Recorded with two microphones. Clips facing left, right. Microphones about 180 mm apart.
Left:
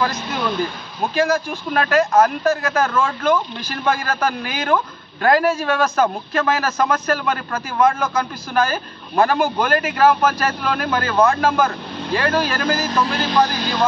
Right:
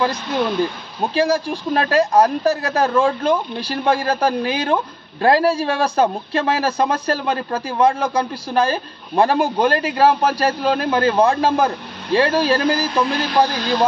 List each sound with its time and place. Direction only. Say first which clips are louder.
0.0 s a man's voice: right 2 dB; 30° right (ahead or behind)